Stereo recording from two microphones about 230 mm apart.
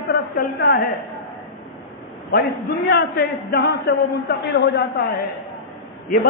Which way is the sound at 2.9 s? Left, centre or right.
Left.